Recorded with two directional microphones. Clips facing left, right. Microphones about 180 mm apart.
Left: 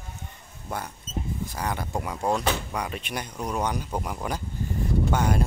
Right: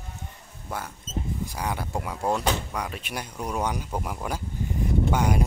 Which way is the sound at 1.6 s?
5° right (ahead or behind).